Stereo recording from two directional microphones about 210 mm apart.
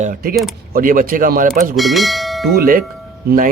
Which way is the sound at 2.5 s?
45° right (ahead or behind).